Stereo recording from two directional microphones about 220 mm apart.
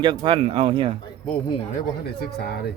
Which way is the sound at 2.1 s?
45° left (ahead or behind).